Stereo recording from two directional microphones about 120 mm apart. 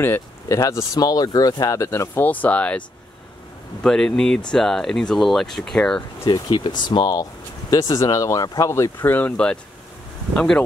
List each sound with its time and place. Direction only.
0.0 s speech: 20° left (ahead or behind)
3.8 s speech: 5° left (ahead or behind)
6.2 s speech: 40° left (ahead or behind); by 10.6 s 5° left (ahead or behind)